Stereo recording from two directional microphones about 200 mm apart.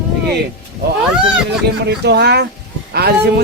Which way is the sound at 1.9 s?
55° right (ahead or behind).